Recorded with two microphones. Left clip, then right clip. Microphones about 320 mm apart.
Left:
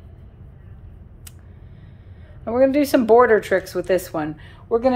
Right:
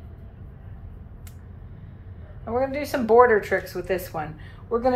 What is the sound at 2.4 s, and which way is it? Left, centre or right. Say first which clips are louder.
Speech: left 8 dB; left.